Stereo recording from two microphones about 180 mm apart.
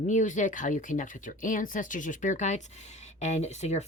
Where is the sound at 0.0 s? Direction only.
45° left (ahead or behind).